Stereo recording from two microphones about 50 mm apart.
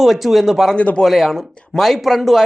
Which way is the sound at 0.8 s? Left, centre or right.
Left.